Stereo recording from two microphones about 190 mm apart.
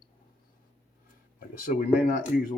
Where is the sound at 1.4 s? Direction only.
45° left (ahead or behind).